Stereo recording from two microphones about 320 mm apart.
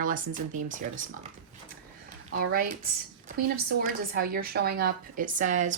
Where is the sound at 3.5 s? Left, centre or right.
Right.